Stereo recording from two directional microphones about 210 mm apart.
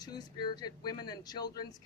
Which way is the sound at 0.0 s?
20° left (ahead or behind).